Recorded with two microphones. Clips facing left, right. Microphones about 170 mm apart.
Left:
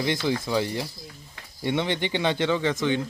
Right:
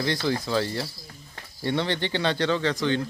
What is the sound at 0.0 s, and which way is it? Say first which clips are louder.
Speech: left 1 dB; 15° left (ahead or behind).